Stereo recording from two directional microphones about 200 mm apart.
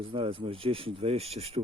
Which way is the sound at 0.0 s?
25° right (ahead or behind).